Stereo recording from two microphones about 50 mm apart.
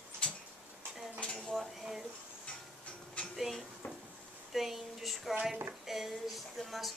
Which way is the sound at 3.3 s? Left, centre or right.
Centre.